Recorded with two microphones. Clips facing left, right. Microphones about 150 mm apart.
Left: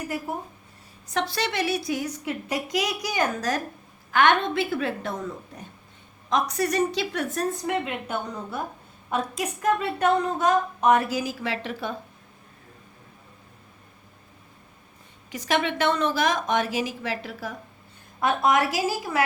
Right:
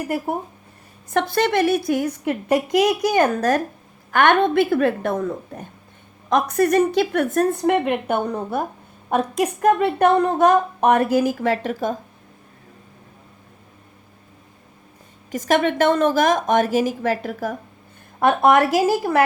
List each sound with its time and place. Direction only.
1.1 s a woman's voice: 50° right (ahead or behind)
15.3 s a woman's voice: 45° right (ahead or behind)
18.2 s a woman's voice: 60° right (ahead or behind)